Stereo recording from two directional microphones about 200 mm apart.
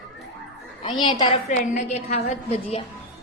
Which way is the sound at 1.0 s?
20° left (ahead or behind).